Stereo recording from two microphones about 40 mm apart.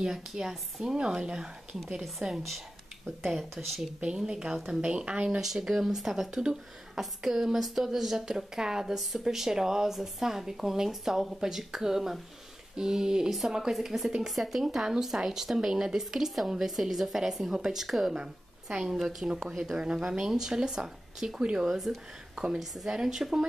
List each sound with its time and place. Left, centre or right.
0.0 s speech: centre
2.0 s speech: centre
3.6 s a woman's voice: centre
5.4 s speech: centre
18.1 s a sound: right
19.0 s speech: centre